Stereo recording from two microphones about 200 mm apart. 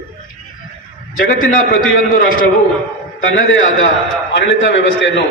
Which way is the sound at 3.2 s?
70° left (ahead or behind).